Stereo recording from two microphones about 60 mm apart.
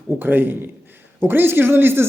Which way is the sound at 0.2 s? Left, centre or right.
Right.